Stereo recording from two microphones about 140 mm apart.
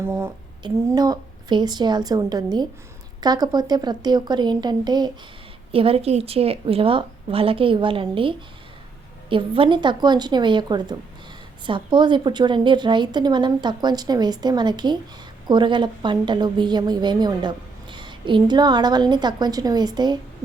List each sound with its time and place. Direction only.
0.0 s a woman's voice: 15° right (ahead or behind)
5.7 s a woman's voice: 40° right (ahead or behind)